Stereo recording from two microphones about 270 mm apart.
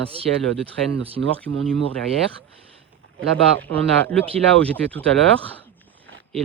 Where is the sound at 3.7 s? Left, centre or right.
Right.